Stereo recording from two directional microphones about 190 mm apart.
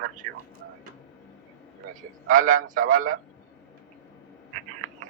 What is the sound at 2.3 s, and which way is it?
Speech, 45° right (ahead or behind).